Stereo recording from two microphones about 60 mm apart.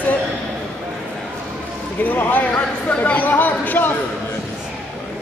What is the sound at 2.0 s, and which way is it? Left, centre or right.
Speech, left.